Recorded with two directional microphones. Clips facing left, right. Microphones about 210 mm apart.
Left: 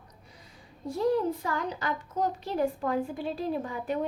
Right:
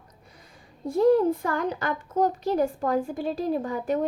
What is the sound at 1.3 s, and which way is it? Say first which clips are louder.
A woman's voice: right 5 dB; 55° right (ahead or behind).